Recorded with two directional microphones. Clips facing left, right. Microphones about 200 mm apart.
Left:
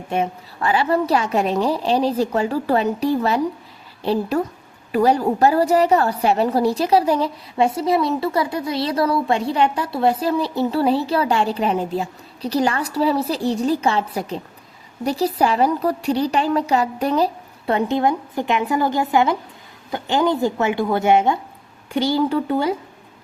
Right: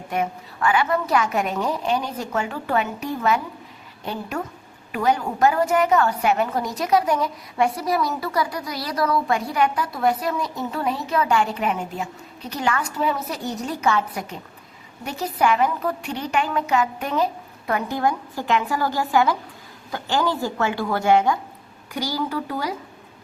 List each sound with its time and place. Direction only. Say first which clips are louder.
0.1 s a woman's voice: left 3 dB; 30° left (ahead or behind)